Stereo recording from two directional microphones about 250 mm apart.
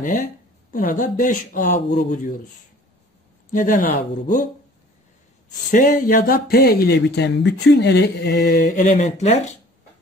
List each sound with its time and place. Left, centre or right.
0.7 s speech: left
3.5 s speech: left
5.7 s speech: left